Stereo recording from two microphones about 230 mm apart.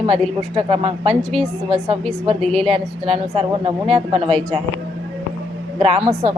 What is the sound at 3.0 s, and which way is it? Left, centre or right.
Speech, right.